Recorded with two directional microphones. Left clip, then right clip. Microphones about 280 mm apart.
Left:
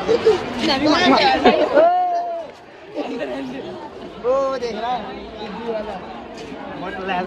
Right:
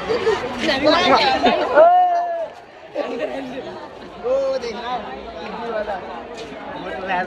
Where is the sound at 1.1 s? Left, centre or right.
Centre.